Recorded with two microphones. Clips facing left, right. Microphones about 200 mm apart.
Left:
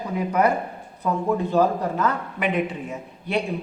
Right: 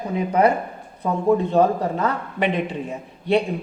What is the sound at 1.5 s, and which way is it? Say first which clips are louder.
A woman's voice: right 2 dB; 30° right (ahead or behind).